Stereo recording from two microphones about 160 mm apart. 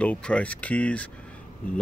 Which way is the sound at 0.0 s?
10° left (ahead or behind).